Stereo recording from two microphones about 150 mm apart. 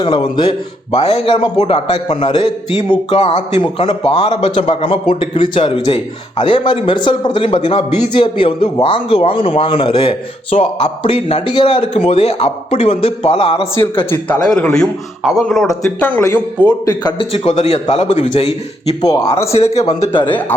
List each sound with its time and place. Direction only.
0.0 s a man's voice: 30° left (ahead or behind)
3.1 s a man's voice: 45° left (ahead or behind)
14.0 s a man's voice: 15° left (ahead or behind)
14.7 s a man's voice: centre (ahead or behind)
16.6 s a man's voice: 25° left (ahead or behind)
17.3 s a man's voice: 45° left (ahead or behind)
20.2 s a man's voice: 10° left (ahead or behind)